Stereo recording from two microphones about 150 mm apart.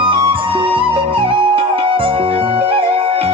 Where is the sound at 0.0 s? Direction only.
35° right (ahead or behind).